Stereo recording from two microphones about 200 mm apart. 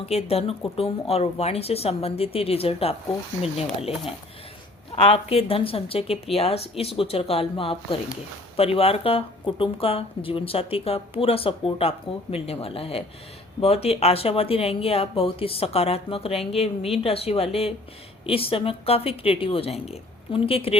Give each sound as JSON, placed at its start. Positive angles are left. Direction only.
{"t": 0.0, "sound": "speech", "side_deg": 30}